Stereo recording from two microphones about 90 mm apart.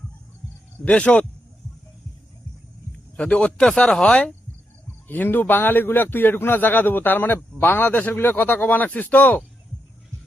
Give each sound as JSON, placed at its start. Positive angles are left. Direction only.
{"t": 0.9, "sound": "speech", "side_deg": 15}
{"t": 3.2, "sound": "speech", "side_deg": 15}
{"t": 5.0, "sound": "a man's voice", "side_deg": 20}